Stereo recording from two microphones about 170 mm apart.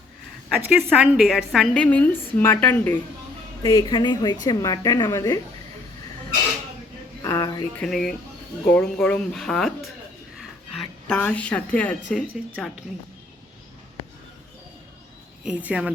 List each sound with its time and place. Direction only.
0.5 s a woman's voice: 10° right (ahead or behind); by 3.0 s 10° left (ahead or behind)
3.6 s a woman's voice: 25° left (ahead or behind)
7.2 s speech: 20° left (ahead or behind)
7.8 s speech: 5° left (ahead or behind)
10.3 s a sound: 5° left (ahead or behind)
15.4 s speech: 5° right (ahead or behind)